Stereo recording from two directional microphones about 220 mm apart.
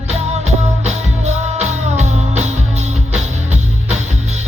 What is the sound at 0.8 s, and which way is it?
Music, 30° right (ahead or behind).